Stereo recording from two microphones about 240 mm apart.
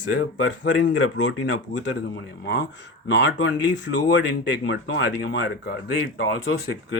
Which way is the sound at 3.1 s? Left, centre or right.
Left.